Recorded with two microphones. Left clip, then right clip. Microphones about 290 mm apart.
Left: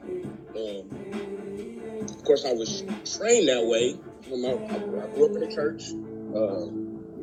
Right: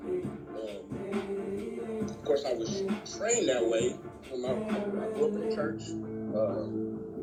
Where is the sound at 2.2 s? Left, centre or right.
Left.